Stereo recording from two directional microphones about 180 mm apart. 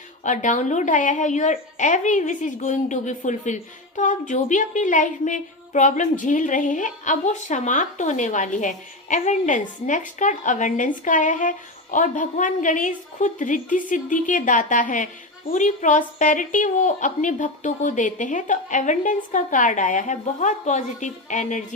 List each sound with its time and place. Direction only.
0.2 s a woman's voice: 45° left (ahead or behind)